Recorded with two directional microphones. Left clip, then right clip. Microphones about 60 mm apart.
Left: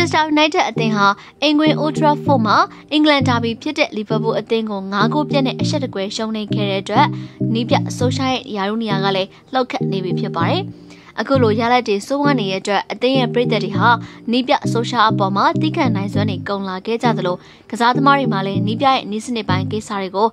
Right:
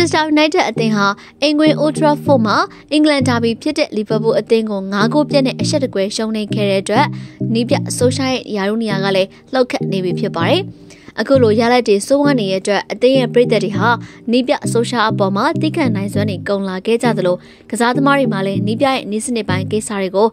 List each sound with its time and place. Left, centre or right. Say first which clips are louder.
0.0 s a woman's voice: right 2 dB; right
11.1 s a woman's voice: right 4 dB; right
13.9 s a woman's voice: right 2 dB; centre
16.4 s a woman's voice: right 5 dB; right
17.1 s a woman's voice: right 4 dB; right